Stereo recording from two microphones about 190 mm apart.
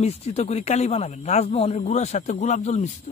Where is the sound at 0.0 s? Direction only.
35° left (ahead or behind).